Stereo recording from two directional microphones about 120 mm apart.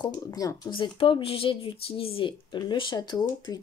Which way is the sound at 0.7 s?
45° left (ahead or behind).